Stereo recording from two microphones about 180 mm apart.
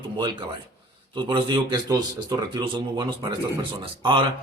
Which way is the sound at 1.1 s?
25° right (ahead or behind).